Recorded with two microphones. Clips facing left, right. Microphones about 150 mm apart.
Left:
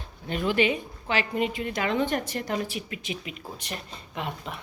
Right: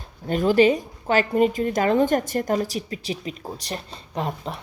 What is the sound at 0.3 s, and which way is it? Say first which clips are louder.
A woman's voice: right 7 dB; 40° right (ahead or behind).